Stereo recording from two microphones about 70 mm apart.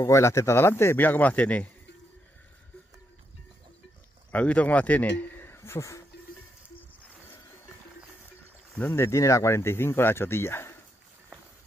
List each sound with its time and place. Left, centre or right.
0.0 s a man's voice: left
4.3 s a man's voice: centre; by 6.0 s left
8.7 s a man's voice: left